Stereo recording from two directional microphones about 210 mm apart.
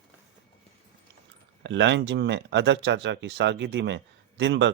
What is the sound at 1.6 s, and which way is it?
Speech, 55° right (ahead or behind).